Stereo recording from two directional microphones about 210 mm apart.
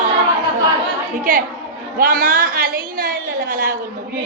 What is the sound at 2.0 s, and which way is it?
A woman's voice, 45° right (ahead or behind).